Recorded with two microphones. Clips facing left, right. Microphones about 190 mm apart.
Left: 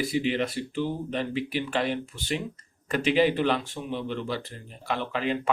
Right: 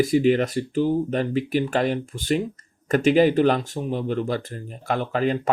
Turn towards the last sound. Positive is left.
turn(degrees=-45)  # may be behind; listen again after turning